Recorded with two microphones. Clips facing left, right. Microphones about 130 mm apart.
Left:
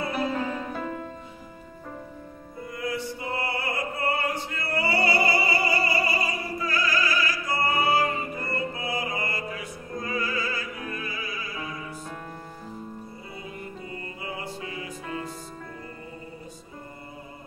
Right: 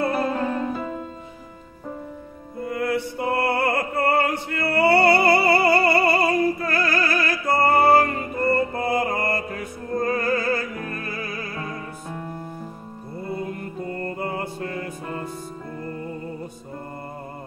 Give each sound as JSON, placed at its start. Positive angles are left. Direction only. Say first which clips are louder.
{"t": 2.6, "sound": "music", "louder": "right 7 dB", "side_deg": -60}
{"t": 13.3, "sound": "music", "louder": "right 10 dB", "side_deg": -55}